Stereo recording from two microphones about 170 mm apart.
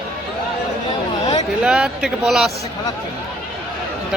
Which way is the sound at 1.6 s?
5° right (ahead or behind).